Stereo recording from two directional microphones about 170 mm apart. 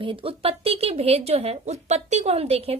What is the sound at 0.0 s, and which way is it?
A woman's voice, 30° right (ahead or behind).